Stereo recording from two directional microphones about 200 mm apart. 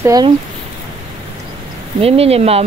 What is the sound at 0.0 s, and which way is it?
Speech, 20° right (ahead or behind).